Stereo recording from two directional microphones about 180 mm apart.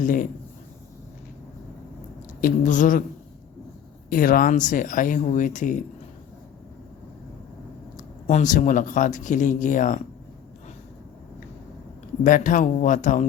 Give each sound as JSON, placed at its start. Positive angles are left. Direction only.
{"t": 0.0, "sound": "speech", "side_deg": 45}
{"t": 2.4, "sound": "speech", "side_deg": 45}
{"t": 4.1, "sound": "speech", "side_deg": 50}
{"t": 8.3, "sound": "speech", "side_deg": 45}
{"t": 12.2, "sound": "speech", "side_deg": 45}